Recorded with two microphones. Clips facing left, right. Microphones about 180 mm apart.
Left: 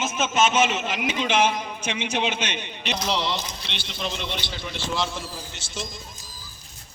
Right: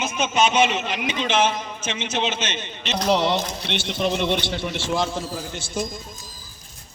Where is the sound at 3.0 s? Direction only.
50° right (ahead or behind).